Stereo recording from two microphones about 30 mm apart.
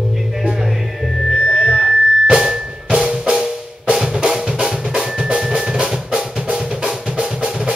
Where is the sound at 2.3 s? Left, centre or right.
Centre.